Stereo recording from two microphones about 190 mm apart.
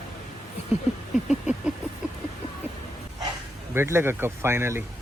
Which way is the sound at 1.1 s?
5° right (ahead or behind).